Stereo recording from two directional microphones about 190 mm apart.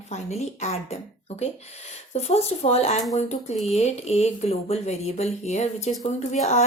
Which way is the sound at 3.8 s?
35° left (ahead or behind).